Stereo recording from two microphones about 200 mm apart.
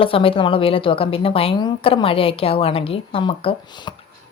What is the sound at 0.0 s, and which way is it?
Speech, 25° left (ahead or behind).